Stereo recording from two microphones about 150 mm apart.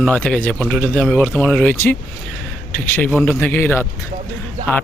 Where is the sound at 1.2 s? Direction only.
10° left (ahead or behind).